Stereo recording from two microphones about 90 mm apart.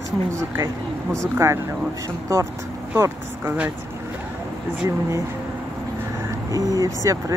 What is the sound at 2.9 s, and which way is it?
Speech, 30° right (ahead or behind).